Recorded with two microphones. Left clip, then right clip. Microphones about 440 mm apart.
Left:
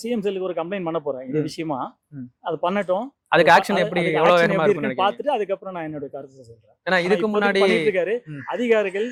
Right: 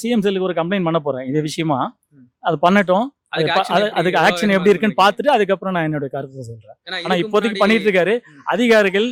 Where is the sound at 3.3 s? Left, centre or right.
Left.